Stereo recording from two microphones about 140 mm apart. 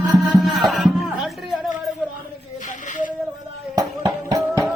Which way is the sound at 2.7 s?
65° left (ahead or behind).